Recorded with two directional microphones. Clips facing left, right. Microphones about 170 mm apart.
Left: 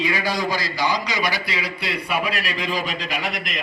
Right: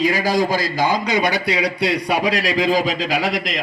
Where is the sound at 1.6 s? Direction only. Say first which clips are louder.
Right 8 dB; 85° right.